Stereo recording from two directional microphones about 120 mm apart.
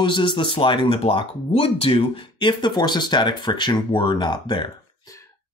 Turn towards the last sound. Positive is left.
turn(degrees=40)  # may be behind; listen again after turning